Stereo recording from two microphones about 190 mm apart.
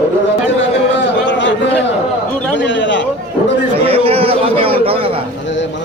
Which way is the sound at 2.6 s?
75° left (ahead or behind).